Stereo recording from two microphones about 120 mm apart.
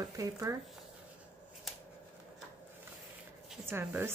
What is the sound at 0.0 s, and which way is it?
Speech, 30° right (ahead or behind).